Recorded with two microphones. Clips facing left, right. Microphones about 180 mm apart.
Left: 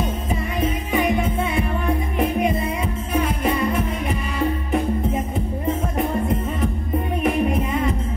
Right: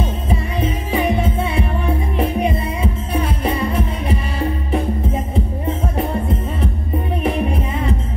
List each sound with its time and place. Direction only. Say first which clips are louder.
0.9 s music: right 2 dB; 30° right (ahead or behind)